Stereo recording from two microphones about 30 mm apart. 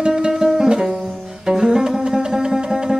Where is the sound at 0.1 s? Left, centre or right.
Centre.